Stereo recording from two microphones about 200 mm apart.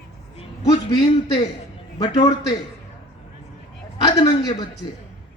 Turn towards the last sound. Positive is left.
turn(degrees=20)  # may be behind; listen again after turning